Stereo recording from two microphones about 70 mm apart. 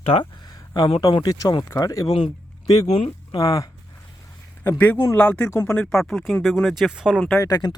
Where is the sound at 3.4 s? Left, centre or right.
Left.